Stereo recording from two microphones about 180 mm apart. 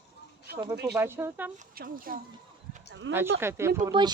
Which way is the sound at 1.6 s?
55° right (ahead or behind).